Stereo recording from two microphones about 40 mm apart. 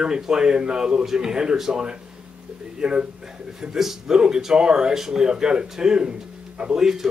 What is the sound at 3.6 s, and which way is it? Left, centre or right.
Speech, centre.